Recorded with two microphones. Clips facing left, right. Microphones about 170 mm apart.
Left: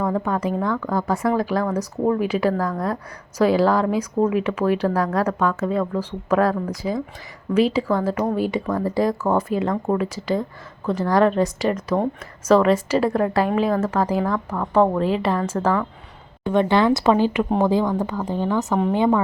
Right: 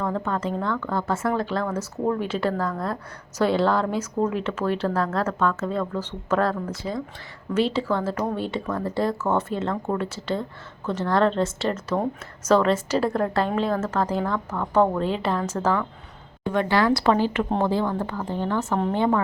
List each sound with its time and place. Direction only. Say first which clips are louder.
0.0 s a woman's voice: left 4 dB; 15° left (ahead or behind)
16.5 s a woman's voice: left 4 dB; 20° left (ahead or behind)